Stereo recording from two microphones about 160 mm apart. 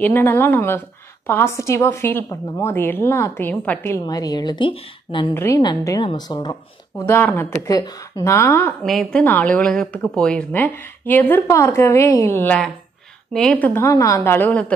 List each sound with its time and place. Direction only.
0.0 s a woman's voice: 15° left (ahead or behind)
4.0 s a woman's voice: 25° left (ahead or behind)
5.3 s a woman's voice: 15° left (ahead or behind)
5.6 s a woman's voice: 25° left (ahead or behind)
7.1 s a woman's voice: 10° left (ahead or behind)
8.8 s a woman's voice: centre (ahead or behind)